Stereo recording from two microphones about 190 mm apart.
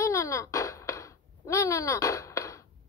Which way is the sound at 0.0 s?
15° left (ahead or behind).